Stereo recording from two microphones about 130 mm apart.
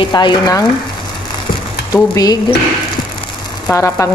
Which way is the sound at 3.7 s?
25° left (ahead or behind).